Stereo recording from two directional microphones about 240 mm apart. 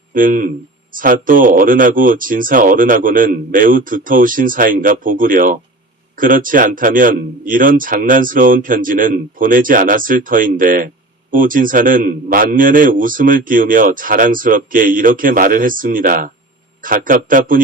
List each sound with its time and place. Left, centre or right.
0.1 s a man's voice: right